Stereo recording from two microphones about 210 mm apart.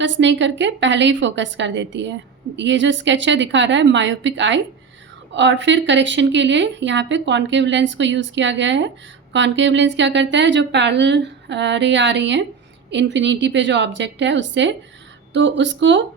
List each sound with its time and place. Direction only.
0.0 s speech: 60° right (ahead or behind)